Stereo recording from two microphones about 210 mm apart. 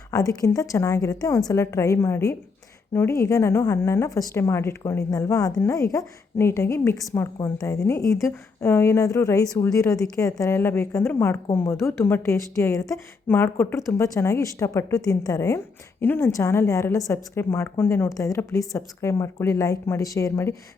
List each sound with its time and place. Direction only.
0.1 s a woman's voice: 15° left (ahead or behind)